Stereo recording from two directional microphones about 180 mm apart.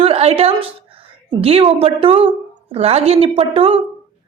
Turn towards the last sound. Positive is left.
turn(degrees=-30)  # may be behind; listen again after turning